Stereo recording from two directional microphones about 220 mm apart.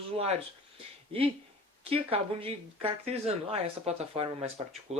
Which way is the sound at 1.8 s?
25° right (ahead or behind).